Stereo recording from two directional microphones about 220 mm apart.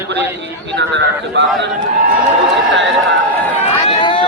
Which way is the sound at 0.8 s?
55° right (ahead or behind).